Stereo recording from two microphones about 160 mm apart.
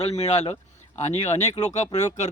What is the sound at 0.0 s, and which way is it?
Speech, 40° left (ahead or behind).